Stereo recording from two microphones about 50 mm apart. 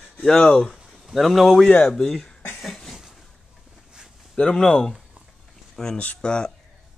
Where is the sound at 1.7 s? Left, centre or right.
Centre.